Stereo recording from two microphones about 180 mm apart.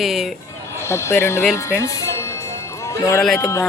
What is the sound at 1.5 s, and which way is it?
Music, 15° left (ahead or behind).